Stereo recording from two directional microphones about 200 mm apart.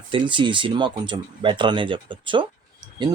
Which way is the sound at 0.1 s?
25° right (ahead or behind).